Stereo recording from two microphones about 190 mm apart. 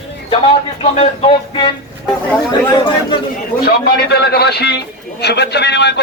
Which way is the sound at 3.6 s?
60° left (ahead or behind).